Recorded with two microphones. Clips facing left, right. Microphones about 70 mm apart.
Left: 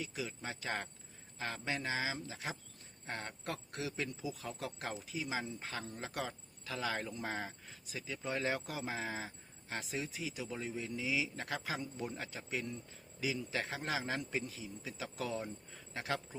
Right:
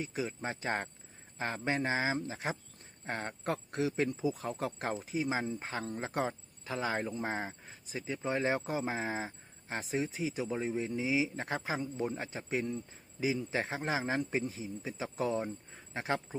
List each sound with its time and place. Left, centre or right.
0.0 s speech: right